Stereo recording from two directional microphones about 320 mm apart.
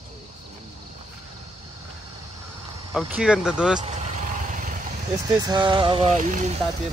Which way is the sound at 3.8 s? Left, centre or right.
Right.